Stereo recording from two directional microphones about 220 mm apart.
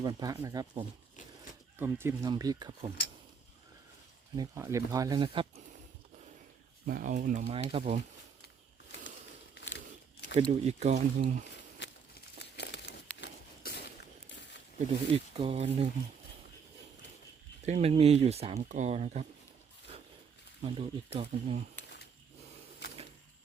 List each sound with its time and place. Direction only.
0.0 s speech: 15° right (ahead or behind)
4.4 s speech: 15° right (ahead or behind)
6.8 s speech: 40° right (ahead or behind)
7.5 s speech: 25° right (ahead or behind)
9.6 s a sound: 50° left (ahead or behind)
10.5 s speech: 30° right (ahead or behind)
11.8 s a sound: 55° left (ahead or behind)
12.4 s crumpling: 50° left (ahead or behind)
13.2 s a sound: 45° left (ahead or behind)
15.1 s speech: 25° right (ahead or behind)
17.7 s speech: 30° right (ahead or behind)
20.6 s speech: 25° right (ahead or behind)